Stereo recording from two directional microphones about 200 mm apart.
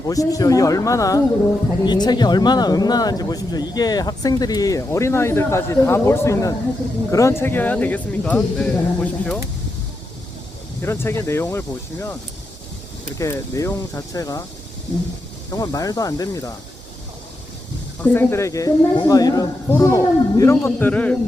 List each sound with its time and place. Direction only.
0.0 s speech: 15° left (ahead or behind)
10.8 s speech: 10° left (ahead or behind)
13.1 s speech: 15° left (ahead or behind)
15.4 s speech: 20° left (ahead or behind)
18.0 s speech: 10° left (ahead or behind)